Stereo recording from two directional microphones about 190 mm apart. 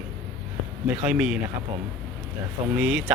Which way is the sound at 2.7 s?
5° right (ahead or behind).